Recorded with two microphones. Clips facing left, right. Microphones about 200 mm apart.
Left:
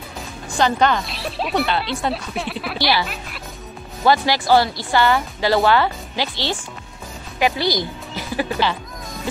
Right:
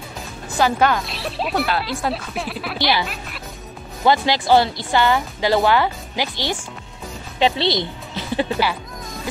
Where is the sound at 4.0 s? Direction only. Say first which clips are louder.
Even; 20° right (ahead or behind).